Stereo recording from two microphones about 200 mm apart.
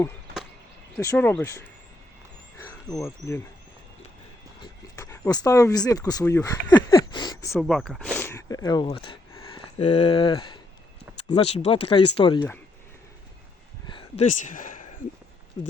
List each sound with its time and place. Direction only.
0.9 s speech: 5° left (ahead or behind)
2.6 s cricket: 15° left (ahead or behind)
4.6 s speech: 15° left (ahead or behind)
7.6 s speech: centre (ahead or behind); by 12.4 s 25° left (ahead or behind)
13.8 s a sound: 25° left (ahead or behind)
14.3 s speech: 40° left (ahead or behind)